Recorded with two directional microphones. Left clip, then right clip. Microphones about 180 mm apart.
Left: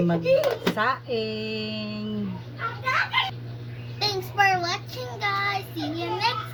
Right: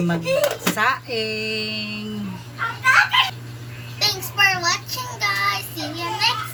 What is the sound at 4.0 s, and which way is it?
Child singing, 10° right (ahead or behind).